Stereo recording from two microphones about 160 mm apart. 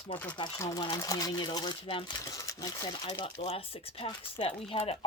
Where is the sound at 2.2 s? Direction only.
20° left (ahead or behind).